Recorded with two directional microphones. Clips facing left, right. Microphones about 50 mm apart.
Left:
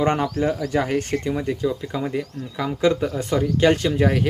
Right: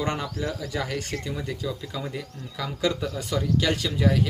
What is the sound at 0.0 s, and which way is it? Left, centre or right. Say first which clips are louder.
Speech: left 8 dB; left.